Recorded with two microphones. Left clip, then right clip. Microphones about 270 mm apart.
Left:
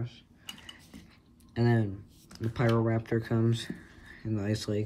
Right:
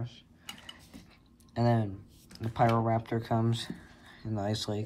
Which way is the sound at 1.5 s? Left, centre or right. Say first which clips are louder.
Even; centre.